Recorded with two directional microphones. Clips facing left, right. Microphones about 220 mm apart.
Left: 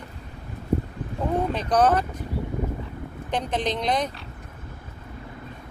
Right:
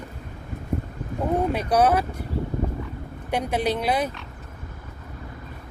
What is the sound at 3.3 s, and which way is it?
Speech, 10° right (ahead or behind).